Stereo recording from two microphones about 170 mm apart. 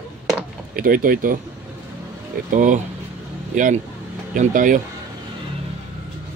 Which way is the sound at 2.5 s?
45° right (ahead or behind).